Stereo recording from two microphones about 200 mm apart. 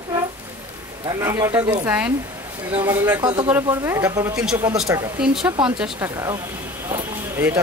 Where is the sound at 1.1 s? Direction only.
15° right (ahead or behind).